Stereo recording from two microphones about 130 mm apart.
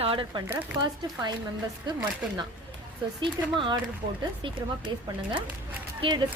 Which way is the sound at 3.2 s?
40° right (ahead or behind).